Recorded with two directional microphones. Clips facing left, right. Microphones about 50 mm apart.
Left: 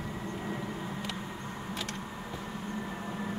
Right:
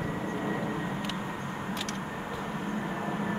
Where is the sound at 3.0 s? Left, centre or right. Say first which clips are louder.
Right 5 dB; right.